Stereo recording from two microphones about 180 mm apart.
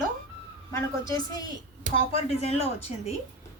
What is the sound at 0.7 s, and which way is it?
Speech, 15° left (ahead or behind).